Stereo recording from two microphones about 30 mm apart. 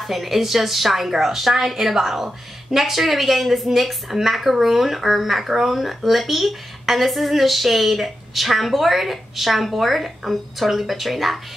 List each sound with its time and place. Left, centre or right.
0.0 s speech: centre